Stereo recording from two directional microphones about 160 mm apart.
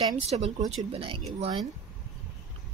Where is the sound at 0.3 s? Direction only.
40° right (ahead or behind).